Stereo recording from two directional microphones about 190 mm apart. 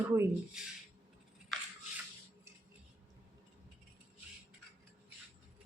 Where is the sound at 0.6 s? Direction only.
5° right (ahead or behind).